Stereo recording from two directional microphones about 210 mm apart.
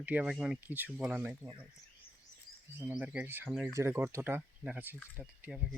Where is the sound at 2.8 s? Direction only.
5° right (ahead or behind).